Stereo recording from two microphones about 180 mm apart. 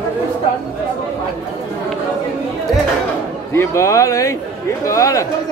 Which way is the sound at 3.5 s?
15° left (ahead or behind).